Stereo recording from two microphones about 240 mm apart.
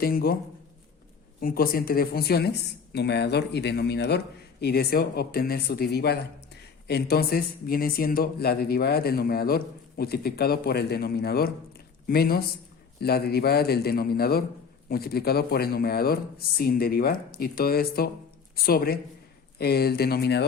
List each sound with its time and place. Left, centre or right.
0.0 s speech: left
1.4 s speech: left